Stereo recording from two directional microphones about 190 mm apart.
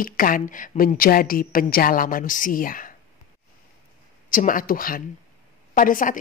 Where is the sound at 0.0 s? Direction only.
45° left (ahead or behind).